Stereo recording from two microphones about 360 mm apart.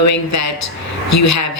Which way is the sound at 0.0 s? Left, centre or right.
Left.